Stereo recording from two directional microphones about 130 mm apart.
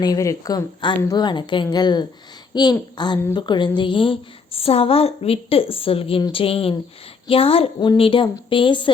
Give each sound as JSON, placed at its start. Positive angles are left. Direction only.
{"t": 0.0, "sound": "a woman's voice", "side_deg": 25}